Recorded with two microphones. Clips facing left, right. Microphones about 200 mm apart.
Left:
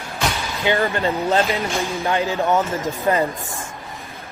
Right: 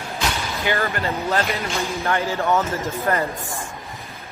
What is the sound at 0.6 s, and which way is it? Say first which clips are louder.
A man's voice: left 4 dB; 20° left (ahead or behind).